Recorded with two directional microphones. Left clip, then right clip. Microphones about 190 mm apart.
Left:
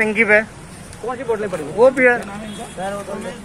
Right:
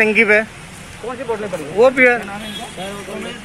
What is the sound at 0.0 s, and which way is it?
Speech, 30° right (ahead or behind).